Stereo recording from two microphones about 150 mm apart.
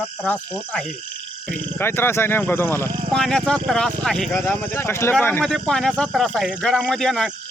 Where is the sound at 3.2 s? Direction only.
5° left (ahead or behind).